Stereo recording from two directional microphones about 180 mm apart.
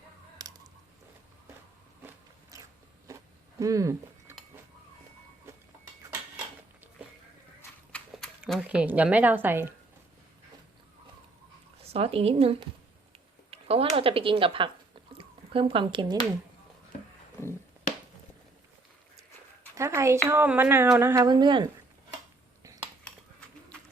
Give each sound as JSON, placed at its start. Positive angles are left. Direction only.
{"t": 0.4, "sound": "a sound", "side_deg": -20}
{"t": 2.0, "sound": "vehicle", "side_deg": -15}
{"t": 3.6, "sound": "speech", "side_deg": -20}
{"t": 7.9, "sound": "speech", "side_deg": 0}
{"t": 11.8, "sound": "a woman's voice", "side_deg": -35}
{"t": 13.5, "sound": "a sound", "side_deg": -35}
{"t": 19.7, "sound": "a woman's voice", "side_deg": -15}